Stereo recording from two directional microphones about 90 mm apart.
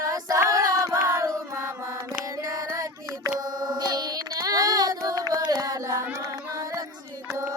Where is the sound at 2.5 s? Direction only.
40° right (ahead or behind).